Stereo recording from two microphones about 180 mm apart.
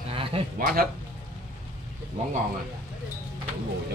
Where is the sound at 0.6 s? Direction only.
55° right (ahead or behind).